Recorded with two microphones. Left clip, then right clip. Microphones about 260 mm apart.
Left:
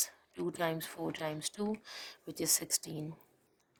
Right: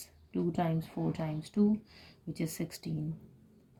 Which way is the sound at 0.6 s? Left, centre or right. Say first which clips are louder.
Right 1 dB; left.